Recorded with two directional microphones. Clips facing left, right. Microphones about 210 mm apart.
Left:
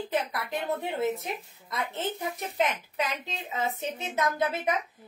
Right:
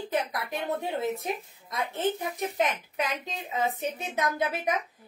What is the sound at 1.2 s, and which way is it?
A woman's voice, 15° right (ahead or behind).